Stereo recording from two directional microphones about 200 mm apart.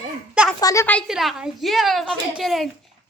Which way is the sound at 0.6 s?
15° left (ahead or behind).